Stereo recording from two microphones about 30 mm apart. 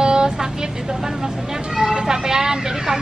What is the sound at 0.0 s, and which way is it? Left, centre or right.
Vehicle, right.